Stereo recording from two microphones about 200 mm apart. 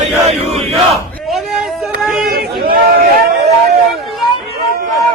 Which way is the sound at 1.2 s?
Centre (ahead or behind).